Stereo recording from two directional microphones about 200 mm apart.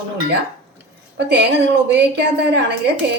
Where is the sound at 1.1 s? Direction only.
55° right (ahead or behind).